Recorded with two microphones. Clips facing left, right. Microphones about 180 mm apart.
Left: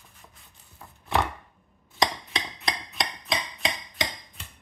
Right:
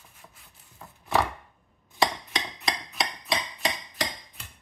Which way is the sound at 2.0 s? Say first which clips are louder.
Right 1 dB; 5° right (ahead or behind).